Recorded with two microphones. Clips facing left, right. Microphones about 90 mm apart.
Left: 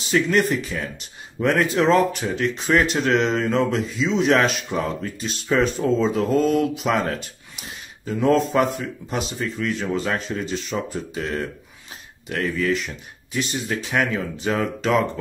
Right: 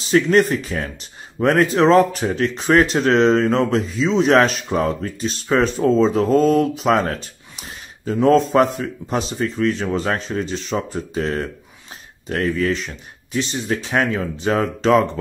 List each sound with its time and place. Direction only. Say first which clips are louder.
0.0 s speech: right 4 dB; 35° right (ahead or behind)